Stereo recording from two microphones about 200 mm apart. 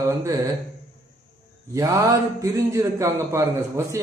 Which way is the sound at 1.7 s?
15° right (ahead or behind).